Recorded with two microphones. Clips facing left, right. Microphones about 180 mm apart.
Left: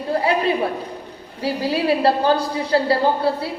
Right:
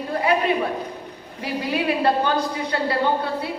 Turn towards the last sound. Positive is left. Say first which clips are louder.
# left 3 dB
turn(degrees=30)  # may be behind; listen again after turning